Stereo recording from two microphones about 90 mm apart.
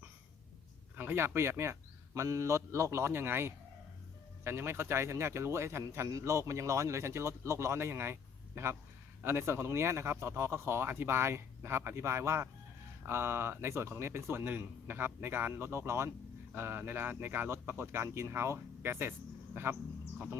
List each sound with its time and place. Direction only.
0.9 s a man's voice: 25° right (ahead or behind)